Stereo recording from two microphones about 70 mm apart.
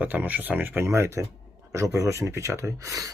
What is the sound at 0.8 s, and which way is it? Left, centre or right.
Speech, right.